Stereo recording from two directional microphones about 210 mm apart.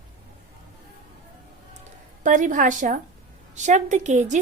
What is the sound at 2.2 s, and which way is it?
A woman's voice, 40° right (ahead or behind).